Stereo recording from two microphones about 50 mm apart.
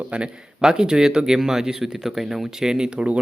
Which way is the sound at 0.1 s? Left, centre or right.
Centre.